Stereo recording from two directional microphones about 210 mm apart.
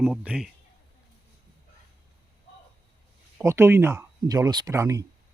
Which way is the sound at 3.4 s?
15° right (ahead or behind).